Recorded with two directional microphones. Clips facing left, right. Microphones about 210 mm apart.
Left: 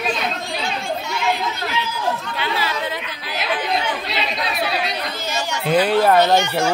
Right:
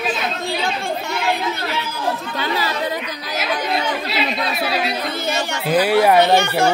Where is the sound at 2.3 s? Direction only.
40° right (ahead or behind).